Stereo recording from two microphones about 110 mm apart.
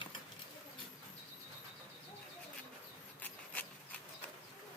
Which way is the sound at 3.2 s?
15° left (ahead or behind).